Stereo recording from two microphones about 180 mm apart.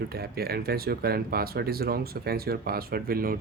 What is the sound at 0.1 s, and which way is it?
Speech, 60° right (ahead or behind).